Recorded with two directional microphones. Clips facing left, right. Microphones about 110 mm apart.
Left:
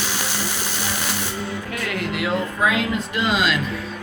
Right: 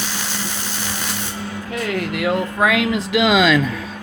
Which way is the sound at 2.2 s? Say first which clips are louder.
Right 3 dB; 65° right (ahead or behind).